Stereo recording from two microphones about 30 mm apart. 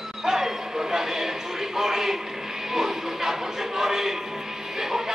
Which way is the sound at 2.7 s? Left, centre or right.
Centre.